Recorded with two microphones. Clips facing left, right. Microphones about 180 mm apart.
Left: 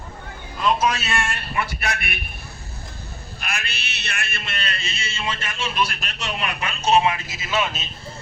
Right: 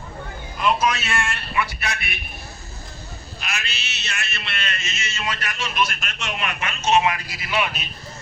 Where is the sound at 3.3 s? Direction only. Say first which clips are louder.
Left 1 dB; 55° left (ahead or behind); by 7.9 s 25° left (ahead or behind).